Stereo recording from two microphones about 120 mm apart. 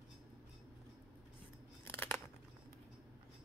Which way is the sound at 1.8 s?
20° left (ahead or behind).